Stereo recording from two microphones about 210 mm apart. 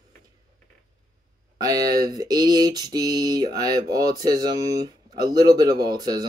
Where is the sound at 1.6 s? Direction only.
15° right (ahead or behind).